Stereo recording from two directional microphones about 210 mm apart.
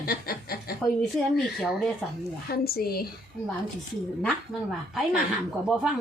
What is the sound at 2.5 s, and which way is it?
Speech, 45° left (ahead or behind).